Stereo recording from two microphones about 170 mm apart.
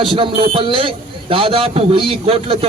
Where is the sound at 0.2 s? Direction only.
30° right (ahead or behind).